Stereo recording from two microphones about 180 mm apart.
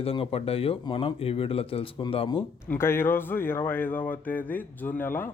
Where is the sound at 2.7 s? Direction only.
15° left (ahead or behind).